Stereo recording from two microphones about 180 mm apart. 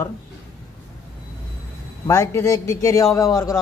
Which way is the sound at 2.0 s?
15° left (ahead or behind).